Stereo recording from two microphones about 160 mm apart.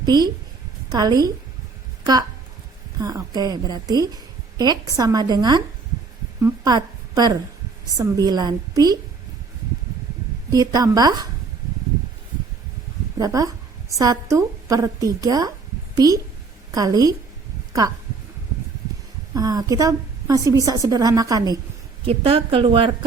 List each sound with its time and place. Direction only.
0.0 s a woman's voice: 25° right (ahead or behind)
3.0 s a woman's voice: 25° right (ahead or behind)
10.5 s a woman's voice: 25° right (ahead or behind)
13.1 s a woman's voice: 20° right (ahead or behind)
19.3 s a woman's voice: 25° right (ahead or behind)
22.0 s speech: 35° right (ahead or behind)